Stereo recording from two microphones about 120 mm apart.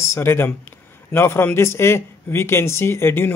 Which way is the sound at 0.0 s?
20° left (ahead or behind).